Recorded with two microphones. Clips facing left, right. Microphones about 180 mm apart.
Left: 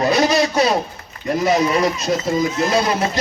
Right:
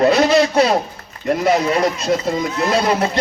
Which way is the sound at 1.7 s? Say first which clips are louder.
Right 1 dB; 60° right (ahead or behind).